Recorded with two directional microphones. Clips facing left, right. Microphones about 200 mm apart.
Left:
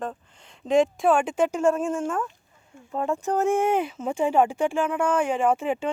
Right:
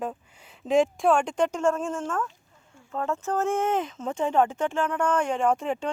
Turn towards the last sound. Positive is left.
turn(degrees=5)  # may be behind; listen again after turning